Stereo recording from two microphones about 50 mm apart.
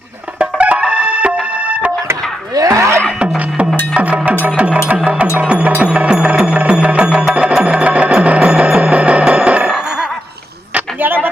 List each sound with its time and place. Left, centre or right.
0.3 s music: right
2.6 s music: right
3.2 s beatboxing: right
3.9 s music: right
11.0 s a sound: right